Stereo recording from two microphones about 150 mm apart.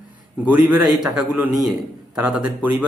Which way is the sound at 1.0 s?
10° right (ahead or behind).